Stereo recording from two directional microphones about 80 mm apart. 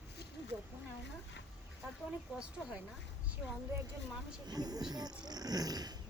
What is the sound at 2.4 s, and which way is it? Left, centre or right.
Speech, centre.